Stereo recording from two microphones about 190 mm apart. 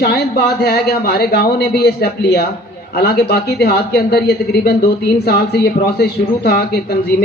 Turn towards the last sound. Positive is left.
turn(degrees=55)  # may be behind; listen again after turning